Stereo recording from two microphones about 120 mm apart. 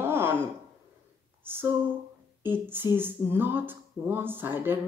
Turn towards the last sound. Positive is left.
turn(degrees=-15)  # may be behind; listen again after turning